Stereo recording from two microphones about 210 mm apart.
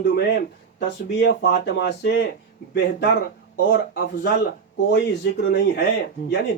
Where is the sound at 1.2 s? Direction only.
55° left (ahead or behind).